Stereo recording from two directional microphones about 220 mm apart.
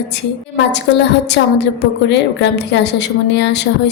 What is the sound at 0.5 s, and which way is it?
A woman's voice, 50° left (ahead or behind).